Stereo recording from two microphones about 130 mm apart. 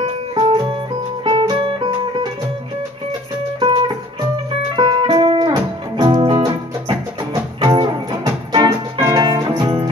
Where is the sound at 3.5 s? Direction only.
40° right (ahead or behind).